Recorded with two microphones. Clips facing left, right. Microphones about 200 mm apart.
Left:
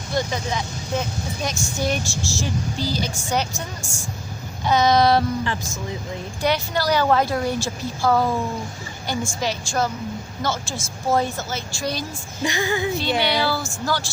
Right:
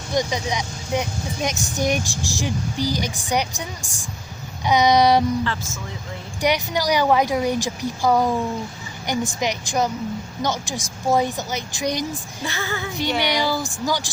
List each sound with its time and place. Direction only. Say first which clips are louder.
0.1 s a woman's voice: right 2 dB; 15° right (ahead or behind)
6.4 s a woman's voice: right 1 dB; 15° right (ahead or behind)
12.4 s female singing: left 7 dB; 15° left (ahead or behind)
12.9 s a woman's voice: left 1 dB; 15° right (ahead or behind)